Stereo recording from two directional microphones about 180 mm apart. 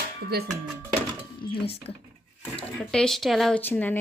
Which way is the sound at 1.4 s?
30° left (ahead or behind).